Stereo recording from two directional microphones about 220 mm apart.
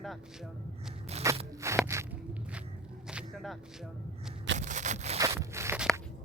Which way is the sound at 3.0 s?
Centre (ahead or behind).